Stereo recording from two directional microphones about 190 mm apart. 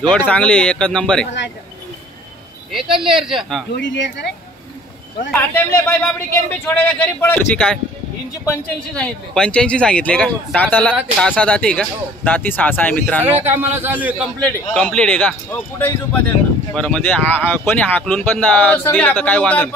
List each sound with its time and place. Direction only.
0.0 s speech: 5° left (ahead or behind)
1.2 s speech: 65° left (ahead or behind)
2.9 s speech: 25° right (ahead or behind)
3.2 s speech: centre (ahead or behind)
3.7 s speech: 65° left (ahead or behind)
5.3 s speech: 10° left (ahead or behind)
13.2 s a man's voice: 10° right (ahead or behind)
14.4 s speech: 5° left (ahead or behind)